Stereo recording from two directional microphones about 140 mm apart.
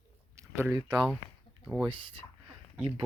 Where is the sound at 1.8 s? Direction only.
35° right (ahead or behind).